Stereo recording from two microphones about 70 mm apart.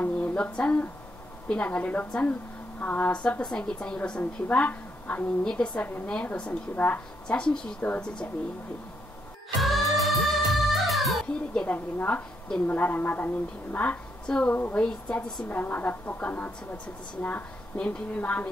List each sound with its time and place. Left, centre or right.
0.0 s a sound: centre
1.5 s a woman's voice: centre
5.4 s a woman's voice: centre
9.6 s music: centre
11.5 s a woman's voice: left
14.5 s a woman's voice: left
14.8 s a woman's voice: centre
15.4 s a woman's voice: left